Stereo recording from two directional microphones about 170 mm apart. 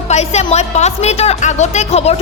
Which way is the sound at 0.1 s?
40° left (ahead or behind).